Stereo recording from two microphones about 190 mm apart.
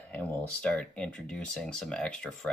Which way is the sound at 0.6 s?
5° left (ahead or behind).